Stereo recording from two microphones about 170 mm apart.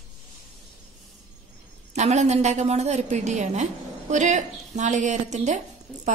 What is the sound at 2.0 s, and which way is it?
A woman's voice, 40° right (ahead or behind).